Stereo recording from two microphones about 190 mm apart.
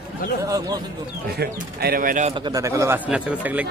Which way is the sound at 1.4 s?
55° right (ahead or behind).